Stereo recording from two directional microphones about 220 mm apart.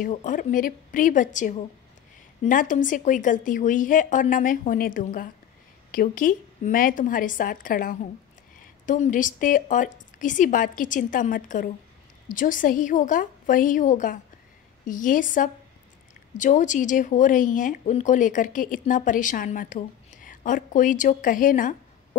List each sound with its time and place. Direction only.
0.0 s speech: 35° left (ahead or behind)